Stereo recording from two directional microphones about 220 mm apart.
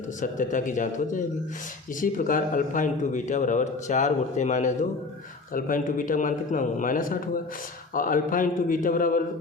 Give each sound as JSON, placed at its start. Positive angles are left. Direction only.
{"t": 0.2, "sound": "a man's voice", "side_deg": 35}